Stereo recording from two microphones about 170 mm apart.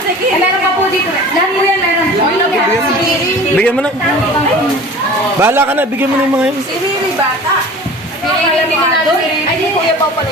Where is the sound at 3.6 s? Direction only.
5° left (ahead or behind).